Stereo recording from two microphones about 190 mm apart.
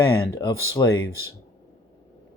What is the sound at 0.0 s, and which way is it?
Speech, 20° left (ahead or behind).